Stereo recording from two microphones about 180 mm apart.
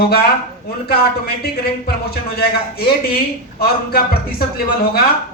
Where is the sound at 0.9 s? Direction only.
60° left (ahead or behind).